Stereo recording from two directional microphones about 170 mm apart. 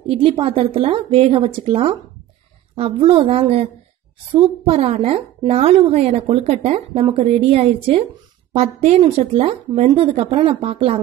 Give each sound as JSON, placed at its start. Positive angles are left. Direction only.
{"t": 0.0, "sound": "a woman's voice", "side_deg": -35}